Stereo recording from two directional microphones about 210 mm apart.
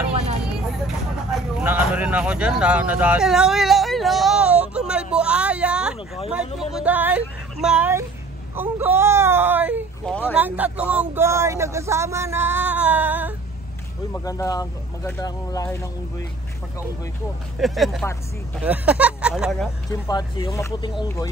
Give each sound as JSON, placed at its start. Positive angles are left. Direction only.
{"t": 0.5, "sound": "speech", "side_deg": -5}
{"t": 10.0, "sound": "speech", "side_deg": 5}
{"t": 10.3, "sound": "speech", "side_deg": -5}
{"t": 14.1, "sound": "speech", "side_deg": 15}
{"t": 17.6, "sound": "speech", "side_deg": 0}
{"t": 19.9, "sound": "speech", "side_deg": 20}